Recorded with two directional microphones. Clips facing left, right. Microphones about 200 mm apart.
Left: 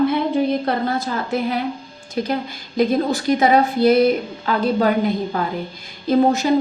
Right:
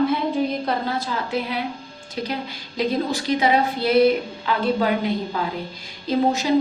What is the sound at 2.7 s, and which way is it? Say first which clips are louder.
A woman's voice: left 5 dB; 50° left (ahead or behind).